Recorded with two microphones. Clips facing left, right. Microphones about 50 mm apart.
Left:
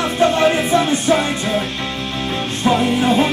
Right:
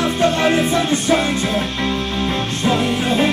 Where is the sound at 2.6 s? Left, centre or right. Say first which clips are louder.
Left 3 dB; centre.